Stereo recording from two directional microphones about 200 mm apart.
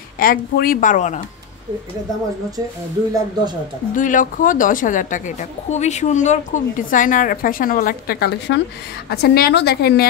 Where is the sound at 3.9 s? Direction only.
40° left (ahead or behind).